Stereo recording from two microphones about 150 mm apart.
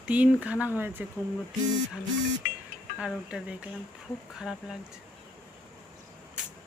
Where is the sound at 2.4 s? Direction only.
60° left (ahead or behind).